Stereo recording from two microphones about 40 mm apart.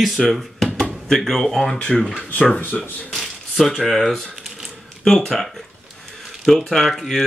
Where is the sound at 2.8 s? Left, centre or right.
Centre.